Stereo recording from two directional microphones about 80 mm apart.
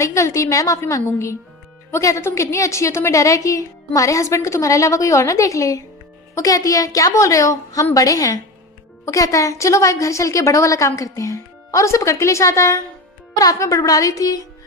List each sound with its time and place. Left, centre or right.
0.0 s a woman's voice: left